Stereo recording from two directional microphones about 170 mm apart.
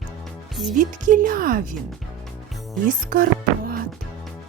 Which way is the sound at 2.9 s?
55° right (ahead or behind).